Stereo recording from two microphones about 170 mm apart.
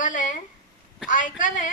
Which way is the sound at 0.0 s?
50° left (ahead or behind).